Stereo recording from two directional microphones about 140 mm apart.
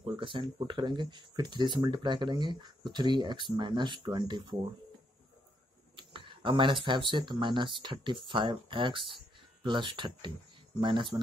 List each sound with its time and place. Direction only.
0.0 s speech: 35° right (ahead or behind)
5.9 s speech: 35° right (ahead or behind)